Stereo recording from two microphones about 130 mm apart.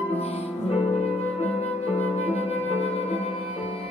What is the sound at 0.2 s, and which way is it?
Music, 50° left (ahead or behind).